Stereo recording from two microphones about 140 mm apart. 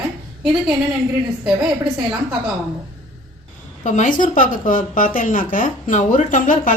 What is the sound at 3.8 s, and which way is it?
Speech, 65° left (ahead or behind).